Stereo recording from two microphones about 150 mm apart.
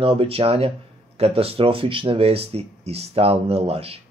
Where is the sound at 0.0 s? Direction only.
40° right (ahead or behind).